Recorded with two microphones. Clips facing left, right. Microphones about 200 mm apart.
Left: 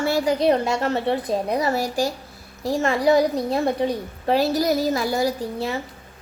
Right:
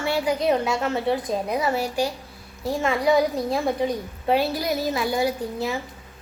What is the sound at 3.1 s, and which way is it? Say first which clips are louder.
Speech: left 2 dB; 10° right (ahead or behind).